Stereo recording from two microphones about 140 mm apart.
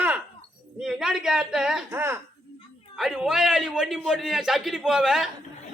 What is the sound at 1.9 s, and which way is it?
Speech, 15° right (ahead or behind).